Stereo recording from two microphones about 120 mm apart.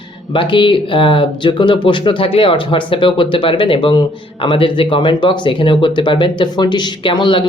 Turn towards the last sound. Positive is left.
turn(degrees=45)  # may be behind; listen again after turning